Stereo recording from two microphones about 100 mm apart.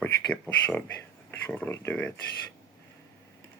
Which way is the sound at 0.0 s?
20° left (ahead or behind).